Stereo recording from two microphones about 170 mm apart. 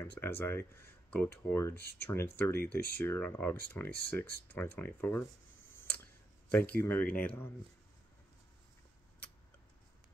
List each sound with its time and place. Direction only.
0.0 s speech: 15° left (ahead or behind)
6.5 s speech: 10° left (ahead or behind)